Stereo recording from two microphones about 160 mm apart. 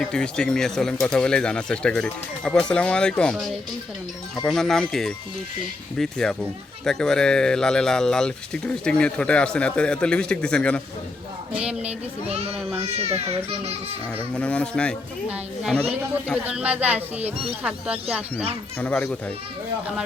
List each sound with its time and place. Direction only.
0.0 s speech: 5° left (ahead or behind)
4.4 s speech: 5° left (ahead or behind)
11.5 s speech: 5° right (ahead or behind)
12.8 s speech: 40° right (ahead or behind)
14.3 s speech: 10° left (ahead or behind)
16.5 s speech: 5° right (ahead or behind)
18.8 s speech: 10° left (ahead or behind)